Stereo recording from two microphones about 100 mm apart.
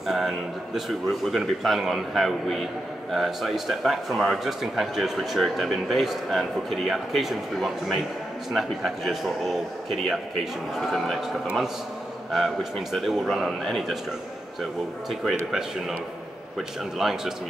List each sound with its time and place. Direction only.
0.0 s a man's voice: 5° right (ahead or behind)
12.9 s a man's voice: 5° right (ahead or behind)